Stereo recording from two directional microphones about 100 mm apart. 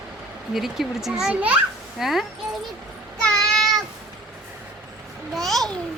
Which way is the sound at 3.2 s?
5° left (ahead or behind).